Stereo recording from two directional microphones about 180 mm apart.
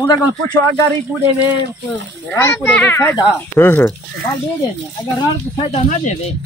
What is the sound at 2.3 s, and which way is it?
Speech, 15° left (ahead or behind).